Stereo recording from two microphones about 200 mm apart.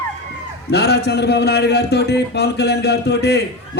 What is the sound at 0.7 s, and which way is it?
A man's voice, 55° left (ahead or behind).